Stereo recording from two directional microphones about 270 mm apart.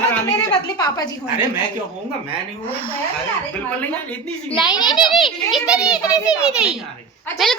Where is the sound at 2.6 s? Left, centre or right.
Centre.